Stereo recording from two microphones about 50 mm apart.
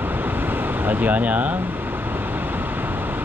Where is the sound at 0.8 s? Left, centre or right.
Right.